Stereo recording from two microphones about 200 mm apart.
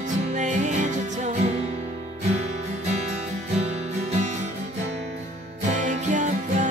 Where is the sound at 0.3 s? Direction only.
35° right (ahead or behind).